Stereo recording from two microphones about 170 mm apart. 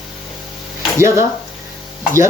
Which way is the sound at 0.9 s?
15° right (ahead or behind).